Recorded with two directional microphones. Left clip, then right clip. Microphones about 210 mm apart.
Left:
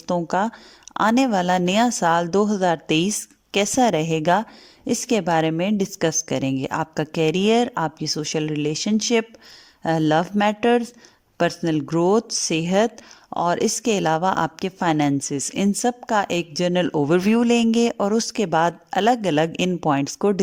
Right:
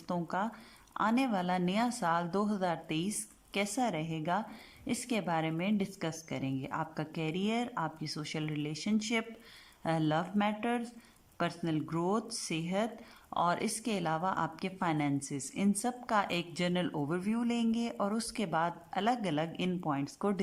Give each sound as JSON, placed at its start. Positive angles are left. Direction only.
{"t": 0.1, "sound": "a woman's voice", "side_deg": 35}